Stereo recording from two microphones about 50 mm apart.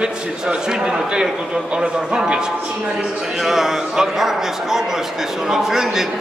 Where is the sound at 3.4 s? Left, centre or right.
Centre.